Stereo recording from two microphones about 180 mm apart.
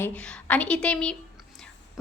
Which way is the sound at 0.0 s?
5° left (ahead or behind).